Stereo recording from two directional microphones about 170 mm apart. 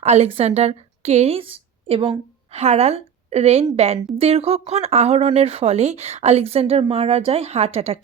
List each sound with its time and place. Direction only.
0.0 s a woman's voice: 40° right (ahead or behind)